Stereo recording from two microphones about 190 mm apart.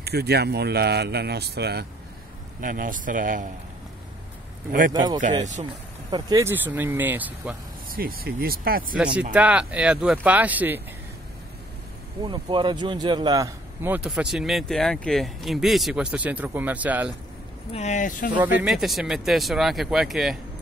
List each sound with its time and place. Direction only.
0.0 s speech: 60° right (ahead or behind)
2.6 s speech: 45° right (ahead or behind)
4.9 s a man's voice: 25° right (ahead or behind)
7.9 s speech: 50° right (ahead or behind)
8.9 s a man's voice: 5° right (ahead or behind)
12.2 s a man's voice: 25° right (ahead or behind); by 17.1 s 10° right (ahead or behind)
17.7 s speech: 40° left (ahead or behind)
18.4 s speech: 10° right (ahead or behind)